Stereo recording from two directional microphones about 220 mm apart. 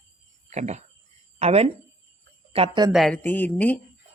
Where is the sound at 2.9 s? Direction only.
Centre (ahead or behind).